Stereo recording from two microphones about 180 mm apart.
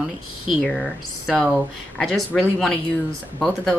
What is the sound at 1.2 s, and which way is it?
Speech, centre (ahead or behind).